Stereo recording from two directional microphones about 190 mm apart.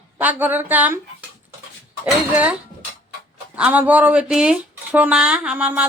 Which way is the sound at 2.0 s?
10° right (ahead or behind).